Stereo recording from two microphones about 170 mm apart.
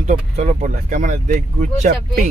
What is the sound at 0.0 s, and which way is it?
Speech, 45° right (ahead or behind).